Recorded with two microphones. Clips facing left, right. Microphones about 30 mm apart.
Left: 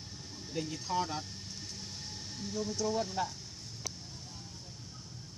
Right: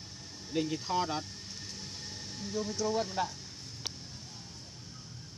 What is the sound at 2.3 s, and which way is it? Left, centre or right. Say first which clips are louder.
Speech: right 1 dB; centre.